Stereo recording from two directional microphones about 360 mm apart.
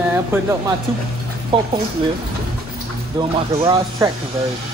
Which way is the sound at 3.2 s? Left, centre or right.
Centre.